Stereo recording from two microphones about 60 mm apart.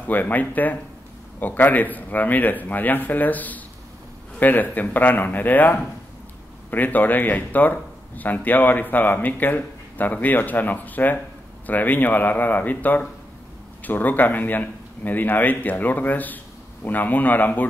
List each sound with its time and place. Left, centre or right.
0.0 s speech: left